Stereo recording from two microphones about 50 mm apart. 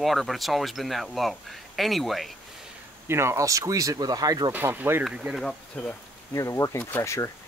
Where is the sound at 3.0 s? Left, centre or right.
Right.